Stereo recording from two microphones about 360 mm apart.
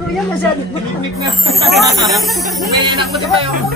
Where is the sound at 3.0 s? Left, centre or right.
Centre.